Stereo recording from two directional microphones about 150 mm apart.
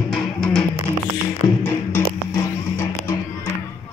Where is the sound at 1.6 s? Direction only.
15° left (ahead or behind).